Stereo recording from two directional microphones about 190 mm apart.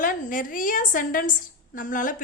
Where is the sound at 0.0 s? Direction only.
45° left (ahead or behind).